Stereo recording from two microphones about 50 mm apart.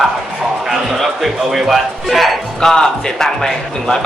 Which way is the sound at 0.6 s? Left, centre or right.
Centre.